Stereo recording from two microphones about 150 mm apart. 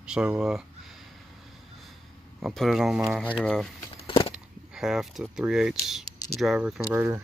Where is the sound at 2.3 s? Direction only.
Centre (ahead or behind).